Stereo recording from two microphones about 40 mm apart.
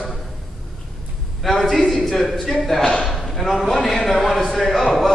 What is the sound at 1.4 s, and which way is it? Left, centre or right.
A man's voice, centre.